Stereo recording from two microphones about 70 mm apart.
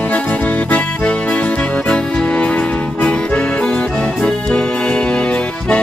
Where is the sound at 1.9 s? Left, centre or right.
Centre.